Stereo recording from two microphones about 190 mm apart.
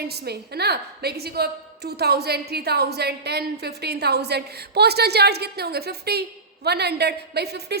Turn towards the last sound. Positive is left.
turn(degrees=-60)  # may be behind; listen again after turning